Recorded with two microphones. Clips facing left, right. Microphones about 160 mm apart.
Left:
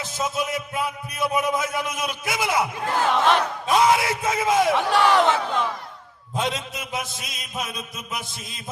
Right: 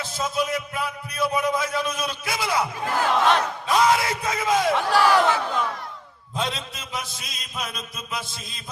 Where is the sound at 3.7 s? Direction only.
20° left (ahead or behind).